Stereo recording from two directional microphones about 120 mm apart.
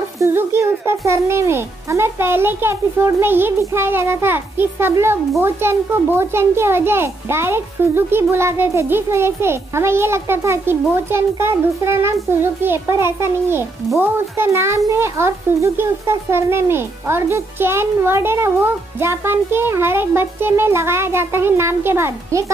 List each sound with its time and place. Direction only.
0.2 s a child's voice: 20° right (ahead or behind)